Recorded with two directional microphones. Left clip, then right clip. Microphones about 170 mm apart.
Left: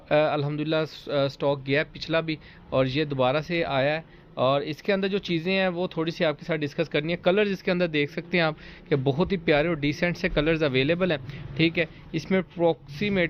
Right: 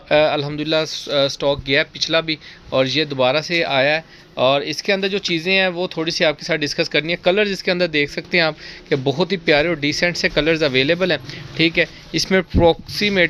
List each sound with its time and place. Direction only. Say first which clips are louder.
0.1 s speech: right 7 dB; 25° right (ahead or behind)